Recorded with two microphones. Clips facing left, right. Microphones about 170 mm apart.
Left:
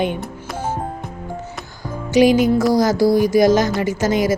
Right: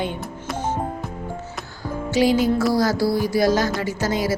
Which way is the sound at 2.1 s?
15° left (ahead or behind).